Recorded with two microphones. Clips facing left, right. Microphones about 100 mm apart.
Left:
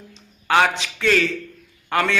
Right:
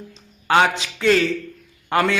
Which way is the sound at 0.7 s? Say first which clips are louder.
Right 2 dB; 35° right (ahead or behind).